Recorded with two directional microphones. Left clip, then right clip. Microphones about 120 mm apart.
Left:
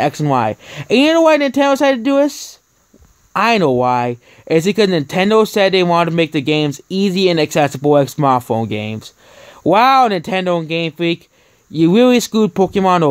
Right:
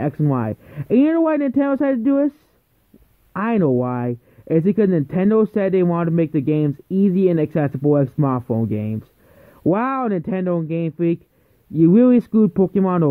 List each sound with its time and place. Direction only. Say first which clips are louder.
0.2 s speech: left 7 dB; 30° right (ahead or behind)
3.3 s speech: left 7 dB; 35° right (ahead or behind)